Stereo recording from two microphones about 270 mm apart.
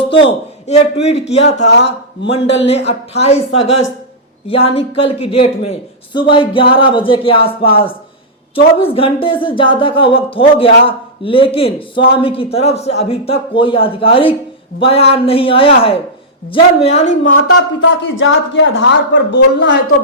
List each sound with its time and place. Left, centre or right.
0.1 s a man's voice: centre
1.6 s a man's voice: left
2.3 s a man's voice: left
17.2 s a man's voice: left